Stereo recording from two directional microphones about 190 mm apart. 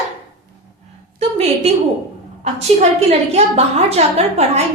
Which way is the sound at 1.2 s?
30° right (ahead or behind).